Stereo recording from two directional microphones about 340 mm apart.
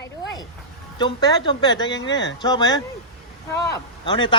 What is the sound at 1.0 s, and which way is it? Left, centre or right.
Speech, centre.